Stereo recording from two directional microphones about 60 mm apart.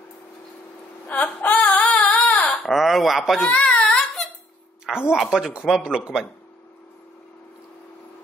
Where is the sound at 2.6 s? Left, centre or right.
Centre.